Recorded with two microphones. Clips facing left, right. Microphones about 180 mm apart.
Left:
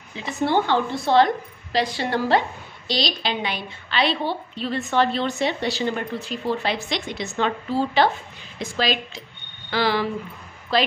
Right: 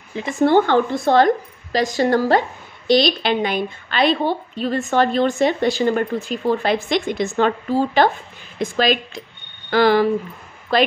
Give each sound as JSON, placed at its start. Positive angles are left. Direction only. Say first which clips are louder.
{"t": 0.1, "sound": "a woman's voice", "louder": "right 7 dB", "side_deg": -50}
{"t": 2.9, "sound": "a woman's voice", "louder": "right 9 dB", "side_deg": -55}